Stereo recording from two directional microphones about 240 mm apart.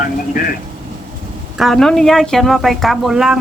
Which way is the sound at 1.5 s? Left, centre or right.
Centre.